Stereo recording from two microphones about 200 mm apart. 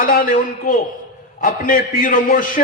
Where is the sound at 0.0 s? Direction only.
45° left (ahead or behind).